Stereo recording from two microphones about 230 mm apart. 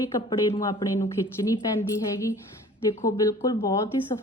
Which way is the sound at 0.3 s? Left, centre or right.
Left.